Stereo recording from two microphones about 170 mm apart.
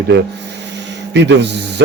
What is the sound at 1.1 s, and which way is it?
Speech, 90° right.